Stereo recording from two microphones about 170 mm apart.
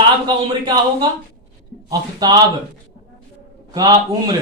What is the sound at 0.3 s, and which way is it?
Speech, 25° right (ahead or behind).